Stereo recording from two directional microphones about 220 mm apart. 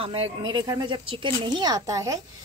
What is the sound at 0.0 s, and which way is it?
Speech, 25° right (ahead or behind).